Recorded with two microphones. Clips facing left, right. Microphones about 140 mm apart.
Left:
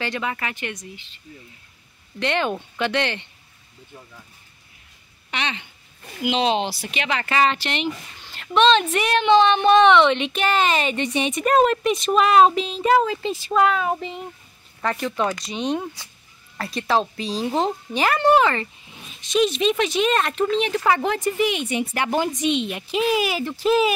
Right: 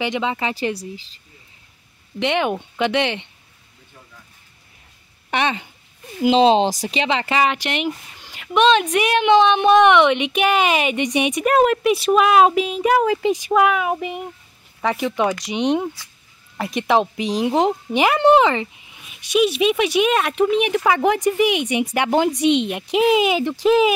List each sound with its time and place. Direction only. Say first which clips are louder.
0.0 s speech: right 5 dB; 20° right (ahead or behind); by 1.2 s 35° right (ahead or behind)
2.1 s a woman's voice: right 3 dB; 15° right (ahead or behind)
6.2 s a woman's voice: right 7 dB; 30° right (ahead or behind); by 22.5 s 15° right (ahead or behind)
22.5 s a woman's voice: right 5 dB; 65° right (ahead or behind)
22.8 s a woman's voice: right 5 dB; 20° right (ahead or behind)